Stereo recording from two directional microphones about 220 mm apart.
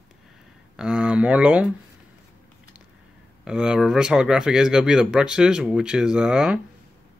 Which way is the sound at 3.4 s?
5° right (ahead or behind).